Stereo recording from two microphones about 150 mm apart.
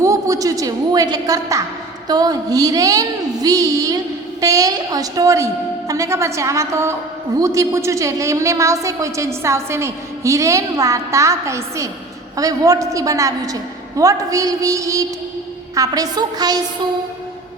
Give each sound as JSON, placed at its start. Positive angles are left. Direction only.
{"t": 0.0, "sound": "a woman's voice", "side_deg": -20}